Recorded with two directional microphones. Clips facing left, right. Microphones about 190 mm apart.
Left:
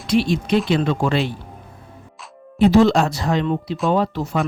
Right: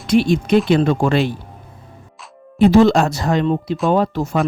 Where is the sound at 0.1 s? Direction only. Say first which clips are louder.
Right 4 dB; 50° right (ahead or behind).